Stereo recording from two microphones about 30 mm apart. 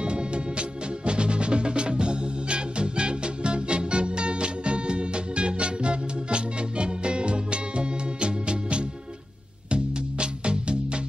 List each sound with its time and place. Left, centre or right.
0.0 s music: right